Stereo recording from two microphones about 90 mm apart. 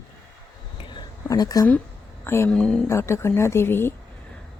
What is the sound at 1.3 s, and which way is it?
Speech, 40° left (ahead or behind).